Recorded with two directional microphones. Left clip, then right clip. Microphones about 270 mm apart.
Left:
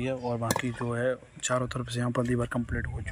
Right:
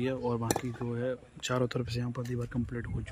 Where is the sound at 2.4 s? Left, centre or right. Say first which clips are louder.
Left 5 dB; centre.